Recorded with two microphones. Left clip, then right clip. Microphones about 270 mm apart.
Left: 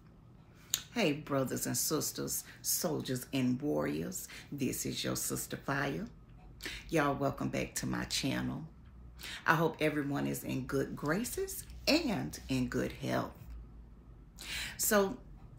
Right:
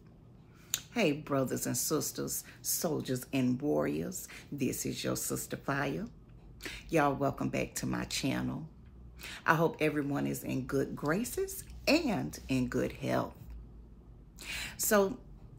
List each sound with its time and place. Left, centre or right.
1.2 s speech: centre
14.5 s a woman's voice: centre